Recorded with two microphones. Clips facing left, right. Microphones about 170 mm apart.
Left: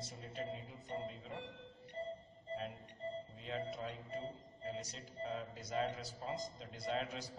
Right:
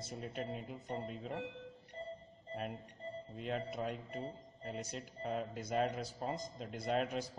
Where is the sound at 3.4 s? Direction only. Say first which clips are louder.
Right 5 dB; 60° right (ahead or behind).